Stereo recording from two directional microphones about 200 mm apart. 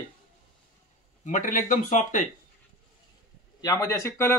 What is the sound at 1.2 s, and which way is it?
Speech, 40° left (ahead or behind).